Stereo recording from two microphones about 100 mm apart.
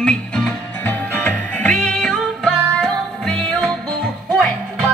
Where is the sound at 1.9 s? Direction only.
5° left (ahead or behind).